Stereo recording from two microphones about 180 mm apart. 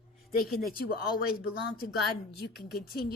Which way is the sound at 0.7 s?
55° left (ahead or behind).